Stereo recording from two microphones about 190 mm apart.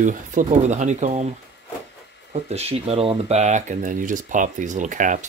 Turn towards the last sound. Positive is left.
turn(degrees=-45)  # may be behind; listen again after turning